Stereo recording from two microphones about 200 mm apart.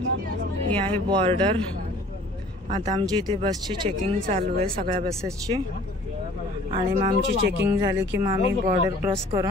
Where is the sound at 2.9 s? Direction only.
20° right (ahead or behind).